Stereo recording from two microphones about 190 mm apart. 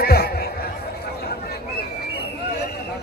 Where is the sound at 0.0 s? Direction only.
55° left (ahead or behind).